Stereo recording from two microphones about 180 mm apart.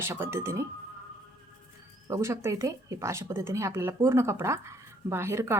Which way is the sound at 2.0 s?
15° right (ahead or behind).